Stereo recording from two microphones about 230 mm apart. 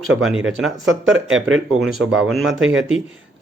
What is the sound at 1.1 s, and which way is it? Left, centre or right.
Speech, right.